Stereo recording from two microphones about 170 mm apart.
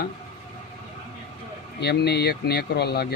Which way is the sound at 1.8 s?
75° left (ahead or behind).